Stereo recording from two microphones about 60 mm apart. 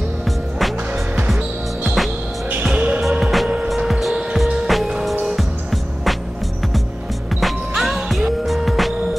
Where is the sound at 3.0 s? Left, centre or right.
Centre.